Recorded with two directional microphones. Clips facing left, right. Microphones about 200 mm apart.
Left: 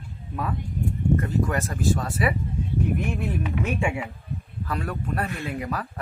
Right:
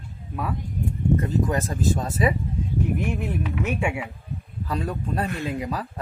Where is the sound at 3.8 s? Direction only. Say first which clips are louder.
Even; 10° right (ahead or behind).